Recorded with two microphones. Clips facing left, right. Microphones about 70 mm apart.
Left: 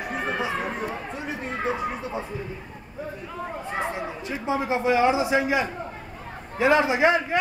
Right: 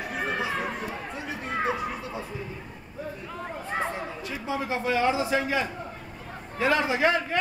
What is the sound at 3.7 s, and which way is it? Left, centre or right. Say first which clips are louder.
Speech: left 1 dB; centre.